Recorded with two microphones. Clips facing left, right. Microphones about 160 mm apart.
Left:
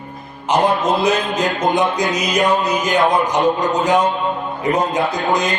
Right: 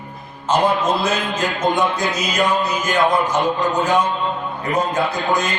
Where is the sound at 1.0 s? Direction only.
20° left (ahead or behind).